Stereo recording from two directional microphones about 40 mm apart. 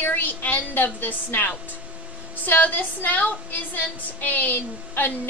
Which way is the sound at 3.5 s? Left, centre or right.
Left.